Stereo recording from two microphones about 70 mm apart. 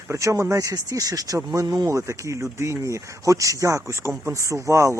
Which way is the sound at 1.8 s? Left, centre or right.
Right.